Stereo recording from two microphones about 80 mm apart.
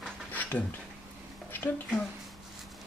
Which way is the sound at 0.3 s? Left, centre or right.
Left.